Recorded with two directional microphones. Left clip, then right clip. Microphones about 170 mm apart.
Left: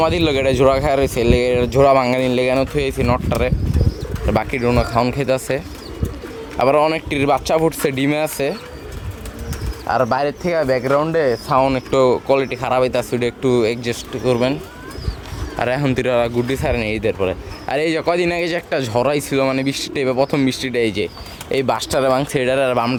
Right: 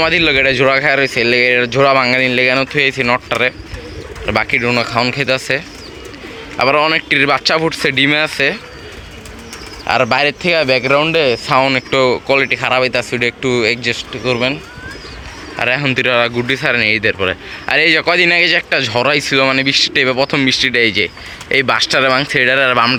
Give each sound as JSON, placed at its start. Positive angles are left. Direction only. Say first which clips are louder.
{"t": 0.0, "sound": "speech", "louder": "right 5 dB", "side_deg": 15}
{"t": 9.9, "sound": "speech", "louder": "right 4 dB", "side_deg": -5}
{"t": 10.4, "sound": "speech", "louder": "right 5 dB", "side_deg": -25}
{"t": 11.4, "sound": "speech", "louder": "right 3 dB", "side_deg": 0}